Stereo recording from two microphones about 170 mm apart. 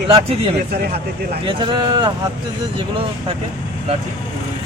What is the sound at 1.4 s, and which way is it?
Speech, 30° right (ahead or behind).